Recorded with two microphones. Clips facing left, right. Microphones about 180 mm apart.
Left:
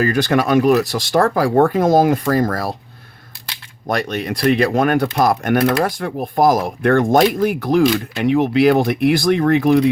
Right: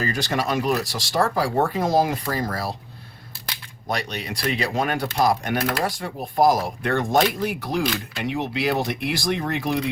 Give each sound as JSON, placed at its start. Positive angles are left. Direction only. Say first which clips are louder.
{"t": 0.0, "sound": "speech", "louder": "left 8 dB", "side_deg": 55}
{"t": 3.8, "sound": "speech", "louder": "left 7 dB", "side_deg": 50}